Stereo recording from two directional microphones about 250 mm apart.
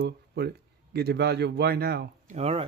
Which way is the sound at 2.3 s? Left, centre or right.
Right.